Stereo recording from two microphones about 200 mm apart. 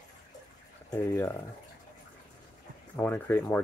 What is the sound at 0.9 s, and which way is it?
Speech, 15° left (ahead or behind).